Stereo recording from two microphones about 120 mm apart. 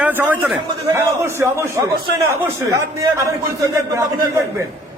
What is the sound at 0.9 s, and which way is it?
Speech, 20° right (ahead or behind).